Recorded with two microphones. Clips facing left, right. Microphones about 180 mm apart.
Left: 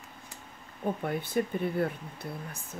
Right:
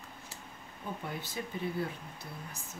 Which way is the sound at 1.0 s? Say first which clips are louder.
Left 10 dB; 55° left (ahead or behind).